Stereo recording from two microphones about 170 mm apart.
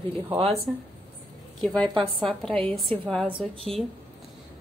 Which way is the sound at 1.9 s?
30° right (ahead or behind).